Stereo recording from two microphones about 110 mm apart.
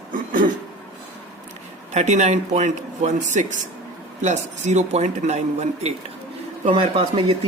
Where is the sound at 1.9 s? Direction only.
90° right.